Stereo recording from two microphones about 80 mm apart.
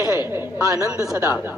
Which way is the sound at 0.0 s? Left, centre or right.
Left.